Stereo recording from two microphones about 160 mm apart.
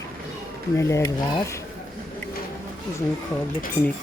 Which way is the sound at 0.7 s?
20° left (ahead or behind).